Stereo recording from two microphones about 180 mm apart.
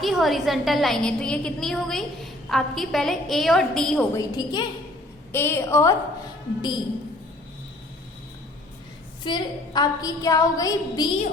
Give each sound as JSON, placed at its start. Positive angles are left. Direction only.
{"t": 0.0, "sound": "a woman's voice", "side_deg": 0}
{"t": 4.1, "sound": "a woman's voice", "side_deg": 20}
{"t": 9.2, "sound": "a woman's voice", "side_deg": 25}